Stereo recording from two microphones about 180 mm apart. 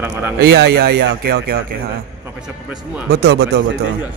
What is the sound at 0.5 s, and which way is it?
Speech, 65° right (ahead or behind).